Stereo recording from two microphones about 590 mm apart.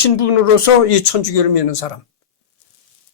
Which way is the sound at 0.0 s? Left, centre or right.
Left.